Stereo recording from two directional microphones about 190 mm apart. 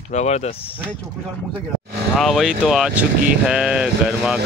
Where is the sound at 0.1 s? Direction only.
40° left (ahead or behind).